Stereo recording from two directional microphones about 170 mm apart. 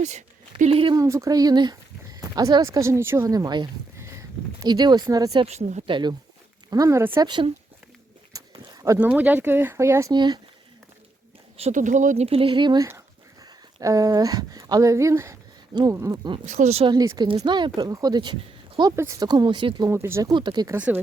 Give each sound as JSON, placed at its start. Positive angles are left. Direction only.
{"t": 0.0, "sound": "speech", "side_deg": -45}
{"t": 0.9, "sound": "speech", "side_deg": -20}
{"t": 5.5, "sound": "speech", "side_deg": -40}
{"t": 5.9, "sound": "speech", "side_deg": -25}
{"t": 7.3, "sound": "speech", "side_deg": -30}
{"t": 8.3, "sound": "a sound", "side_deg": -20}
{"t": 9.0, "sound": "speech", "side_deg": -10}
{"t": 11.5, "sound": "speech", "side_deg": -40}
{"t": 16.5, "sound": "speech", "side_deg": -45}
{"t": 16.9, "sound": "speech", "side_deg": -25}
{"t": 19.9, "sound": "speech", "side_deg": -15}
{"t": 20.3, "sound": "speech", "side_deg": -25}
{"t": 20.7, "sound": "speech", "side_deg": -10}